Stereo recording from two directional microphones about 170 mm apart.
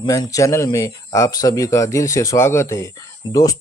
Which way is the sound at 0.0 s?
20° left (ahead or behind).